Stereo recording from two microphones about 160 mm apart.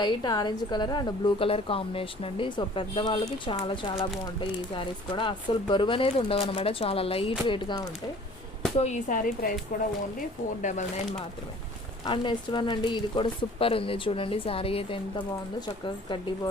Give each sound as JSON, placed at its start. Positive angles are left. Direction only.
{"t": 0.0, "sound": "a woman's voice", "side_deg": 25}
{"t": 8.8, "sound": "a woman's voice", "side_deg": 50}
{"t": 12.0, "sound": "a woman's voice", "side_deg": 30}